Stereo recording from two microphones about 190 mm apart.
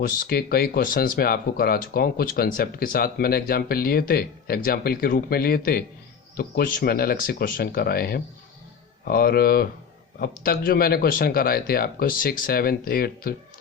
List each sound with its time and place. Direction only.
0.0 s speech: 50° left (ahead or behind)